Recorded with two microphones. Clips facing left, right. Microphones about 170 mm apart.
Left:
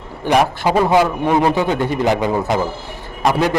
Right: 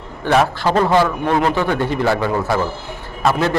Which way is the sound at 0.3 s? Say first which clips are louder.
Even; 15° left (ahead or behind).